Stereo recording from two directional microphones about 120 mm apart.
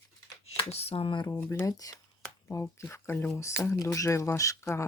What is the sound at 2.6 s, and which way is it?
Speech, 20° left (ahead or behind).